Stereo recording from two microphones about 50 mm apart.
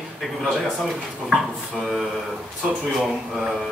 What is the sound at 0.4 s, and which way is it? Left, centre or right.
Speech, centre.